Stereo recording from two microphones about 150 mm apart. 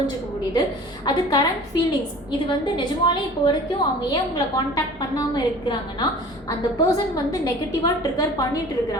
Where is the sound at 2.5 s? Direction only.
30° left (ahead or behind).